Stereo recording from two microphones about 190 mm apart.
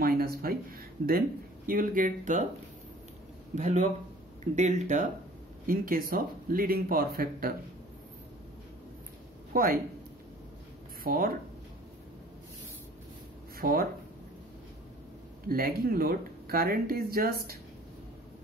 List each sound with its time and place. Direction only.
0.0 s speech: 50° right (ahead or behind)
3.5 s speech: 40° right (ahead or behind)
9.5 s speech: 50° right (ahead or behind)
11.1 s speech: 50° right (ahead or behind)
13.6 s speech: 50° right (ahead or behind)
15.4 s speech: 50° right (ahead or behind)